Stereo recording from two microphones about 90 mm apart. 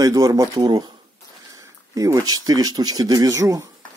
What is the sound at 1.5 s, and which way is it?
Speech, 40° right (ahead or behind).